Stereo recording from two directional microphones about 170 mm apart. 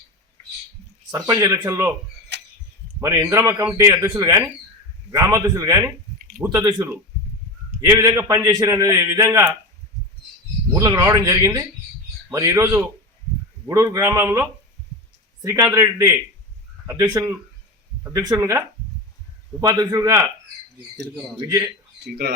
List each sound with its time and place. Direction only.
1.1 s a man's voice: 20° right (ahead or behind)
2.3 s a sound: 90° right
3.0 s a man's voice: 20° right (ahead or behind)
10.8 s a man's voice: 20° right (ahead or behind)
22.0 s speech: 70° right (ahead or behind)